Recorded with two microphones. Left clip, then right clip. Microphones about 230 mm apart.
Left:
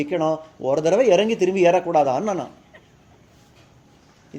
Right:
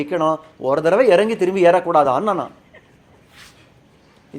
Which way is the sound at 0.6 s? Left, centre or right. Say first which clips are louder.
Right 3 dB; right.